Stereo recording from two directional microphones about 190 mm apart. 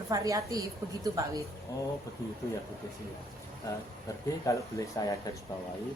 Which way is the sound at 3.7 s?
20° left (ahead or behind).